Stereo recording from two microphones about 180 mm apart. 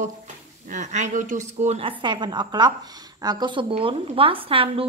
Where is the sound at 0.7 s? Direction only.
40° right (ahead or behind).